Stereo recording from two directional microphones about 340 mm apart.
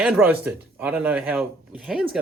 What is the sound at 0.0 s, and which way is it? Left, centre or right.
Speech, centre.